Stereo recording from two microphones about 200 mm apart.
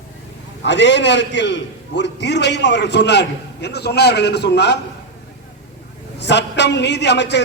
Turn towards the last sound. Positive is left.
turn(degrees=60)  # may be behind; listen again after turning